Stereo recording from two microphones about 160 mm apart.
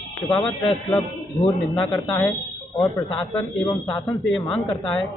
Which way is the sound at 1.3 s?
30° left (ahead or behind).